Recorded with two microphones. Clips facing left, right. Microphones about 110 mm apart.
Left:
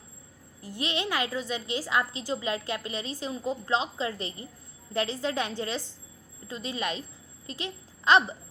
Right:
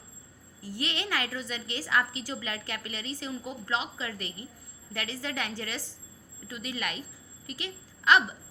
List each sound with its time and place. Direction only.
0.6 s a woman's voice: 20° left (ahead or behind)